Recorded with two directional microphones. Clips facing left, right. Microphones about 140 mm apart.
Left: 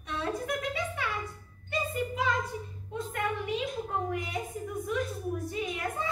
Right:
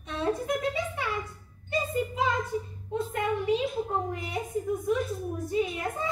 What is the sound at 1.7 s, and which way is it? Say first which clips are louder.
Music: right 3 dB; 25° right (ahead or behind).